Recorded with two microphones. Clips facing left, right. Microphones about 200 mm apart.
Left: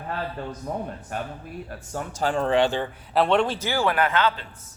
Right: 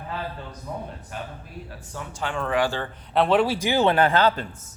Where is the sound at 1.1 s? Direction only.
50° left (ahead or behind).